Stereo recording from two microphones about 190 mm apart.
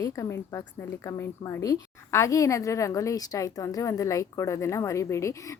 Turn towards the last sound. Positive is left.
turn(degrees=15)  # may be behind; listen again after turning